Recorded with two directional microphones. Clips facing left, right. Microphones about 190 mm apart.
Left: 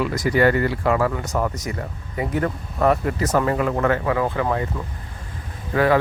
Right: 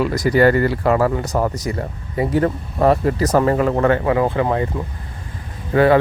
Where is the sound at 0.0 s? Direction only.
35° right (ahead or behind).